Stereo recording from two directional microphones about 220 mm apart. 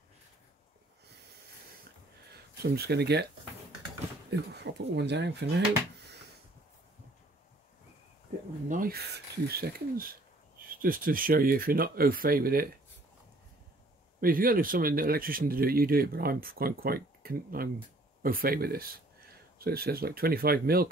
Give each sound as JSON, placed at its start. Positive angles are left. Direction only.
{"t": 2.6, "sound": "speech", "side_deg": -45}
{"t": 4.3, "sound": "speech", "side_deg": -50}
{"t": 8.6, "sound": "speech", "side_deg": -40}
{"t": 14.2, "sound": "speech", "side_deg": -40}